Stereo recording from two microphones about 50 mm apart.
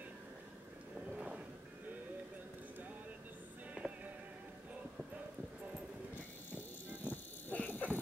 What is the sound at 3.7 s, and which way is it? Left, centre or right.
Music, right.